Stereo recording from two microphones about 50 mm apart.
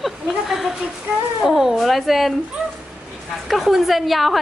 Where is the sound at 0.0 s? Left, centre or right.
Centre.